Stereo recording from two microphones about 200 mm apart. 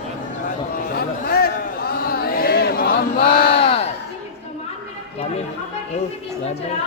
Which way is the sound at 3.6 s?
30° left (ahead or behind).